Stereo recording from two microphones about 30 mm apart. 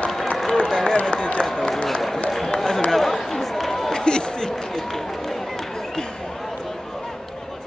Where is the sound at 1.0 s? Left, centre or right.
Left.